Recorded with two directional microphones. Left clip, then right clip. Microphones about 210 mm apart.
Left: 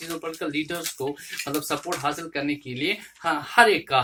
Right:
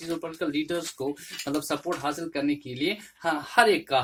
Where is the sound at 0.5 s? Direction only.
55° right (ahead or behind).